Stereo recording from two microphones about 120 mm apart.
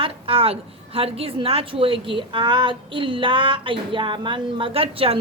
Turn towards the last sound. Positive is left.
turn(degrees=-55)  # may be behind; listen again after turning